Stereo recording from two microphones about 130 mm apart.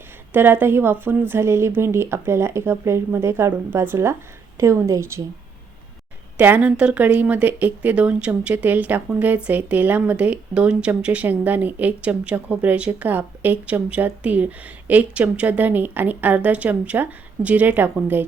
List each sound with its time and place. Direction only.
0.3 s speech: 15° right (ahead or behind)
6.3 s speech: 10° right (ahead or behind)